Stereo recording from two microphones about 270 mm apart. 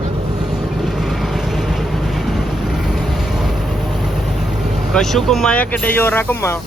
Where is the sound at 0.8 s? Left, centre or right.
Centre.